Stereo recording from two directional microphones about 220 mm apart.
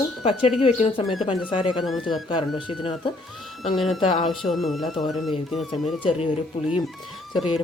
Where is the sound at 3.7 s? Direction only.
Centre (ahead or behind).